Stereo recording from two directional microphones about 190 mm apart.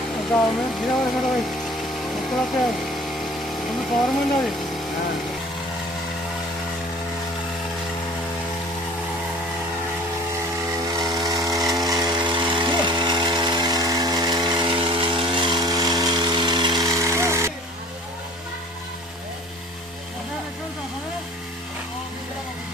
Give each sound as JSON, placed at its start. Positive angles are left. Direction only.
{"t": 0.3, "sound": "speech", "side_deg": 5}
{"t": 2.3, "sound": "a sound", "side_deg": 0}
{"t": 3.7, "sound": "speech", "side_deg": 0}
{"t": 10.8, "sound": "power tool", "side_deg": -20}